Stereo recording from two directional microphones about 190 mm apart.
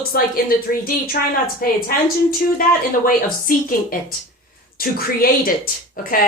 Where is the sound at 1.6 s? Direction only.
50° left (ahead or behind).